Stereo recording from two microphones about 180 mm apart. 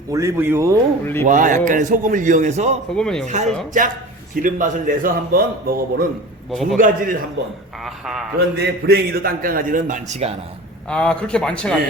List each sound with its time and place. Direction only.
0.1 s speech: 15° right (ahead or behind)
1.2 s a man's voice: 45° right (ahead or behind)
2.9 s a man's voice: 5° left (ahead or behind)
3.2 s a man's voice: 40° right (ahead or behind)
6.5 s a man's voice: centre (ahead or behind)
6.7 s a man's voice: 50° right (ahead or behind)
7.8 s a man's voice: centre (ahead or behind)
8.4 s a man's voice: 60° right (ahead or behind); by 10.3 s 40° right (ahead or behind)
10.8 s a man's voice: 5° left (ahead or behind)